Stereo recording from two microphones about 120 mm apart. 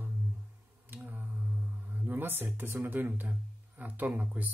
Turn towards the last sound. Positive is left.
turn(degrees=-10)  # may be behind; listen again after turning